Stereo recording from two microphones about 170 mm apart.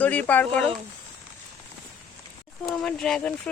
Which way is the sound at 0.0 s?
10° left (ahead or behind).